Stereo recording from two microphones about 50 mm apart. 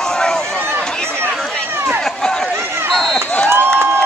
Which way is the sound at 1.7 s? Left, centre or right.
Right.